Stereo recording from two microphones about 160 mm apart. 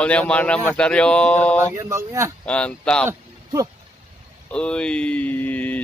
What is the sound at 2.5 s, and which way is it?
Speech, 5° left (ahead or behind).